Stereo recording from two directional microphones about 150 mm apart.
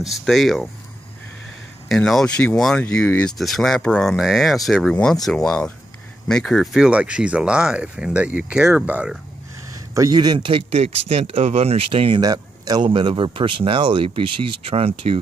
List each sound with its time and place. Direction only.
0.0 s speech: centre (ahead or behind)
1.9 s speech: centre (ahead or behind)
9.9 s speech: 25° right (ahead or behind)
12.2 s speech: 25° right (ahead or behind)